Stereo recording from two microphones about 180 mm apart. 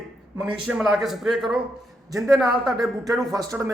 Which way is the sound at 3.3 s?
20° right (ahead or behind).